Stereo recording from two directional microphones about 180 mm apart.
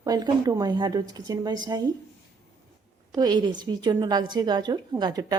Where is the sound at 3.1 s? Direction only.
25° right (ahead or behind).